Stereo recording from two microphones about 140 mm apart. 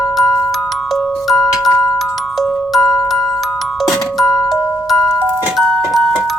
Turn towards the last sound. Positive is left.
turn(degrees=0)  # may be behind; listen again after turning